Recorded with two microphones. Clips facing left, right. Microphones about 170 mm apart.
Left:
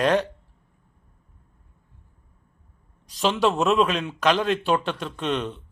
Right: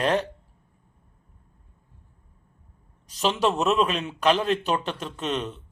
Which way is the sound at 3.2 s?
40° right (ahead or behind).